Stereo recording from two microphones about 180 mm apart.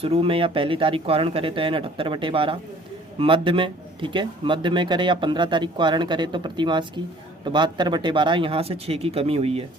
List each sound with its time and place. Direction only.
0.0 s speech: 30° right (ahead or behind)